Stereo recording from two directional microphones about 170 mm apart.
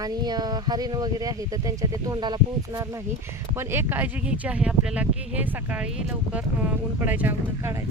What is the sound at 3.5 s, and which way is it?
Speech, 15° right (ahead or behind).